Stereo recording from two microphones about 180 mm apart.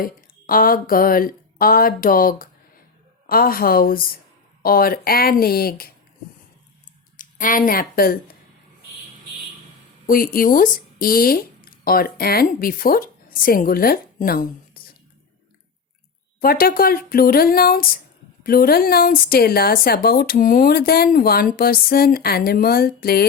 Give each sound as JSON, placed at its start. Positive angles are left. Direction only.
{"t": 0.0, "sound": "speech", "side_deg": 50}
{"t": 7.2, "sound": "a woman's voice", "side_deg": 50}
{"t": 10.1, "sound": "speech", "side_deg": 50}
{"t": 16.4, "sound": "speech", "side_deg": 55}